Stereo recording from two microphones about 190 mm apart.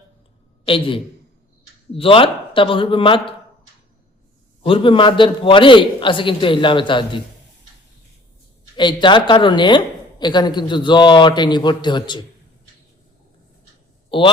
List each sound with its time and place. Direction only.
0.6 s a man's voice: 30° left (ahead or behind)
4.6 s speech: 30° left (ahead or behind)
8.7 s speech: 25° left (ahead or behind)